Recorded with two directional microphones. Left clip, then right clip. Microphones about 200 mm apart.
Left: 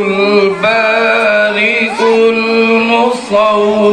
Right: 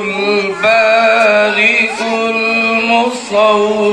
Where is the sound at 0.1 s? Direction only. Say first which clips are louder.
Left 4 dB; 25° left (ahead or behind).